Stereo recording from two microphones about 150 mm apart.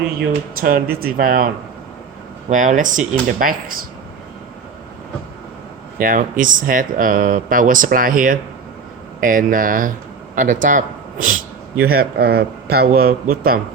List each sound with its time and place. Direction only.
0.6 s speech: 75° right (ahead or behind)
2.5 s speech: 60° right (ahead or behind)
6.0 s speech: 65° right (ahead or behind)
11.8 s speech: 90° right